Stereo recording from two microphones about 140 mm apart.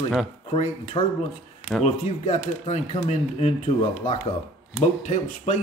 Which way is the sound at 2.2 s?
55° left (ahead or behind).